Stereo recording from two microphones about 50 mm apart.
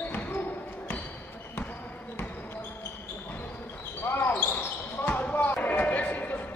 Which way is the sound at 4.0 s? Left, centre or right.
Left.